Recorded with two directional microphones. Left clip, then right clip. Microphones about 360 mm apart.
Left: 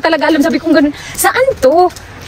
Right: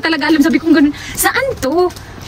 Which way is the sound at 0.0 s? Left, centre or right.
Centre.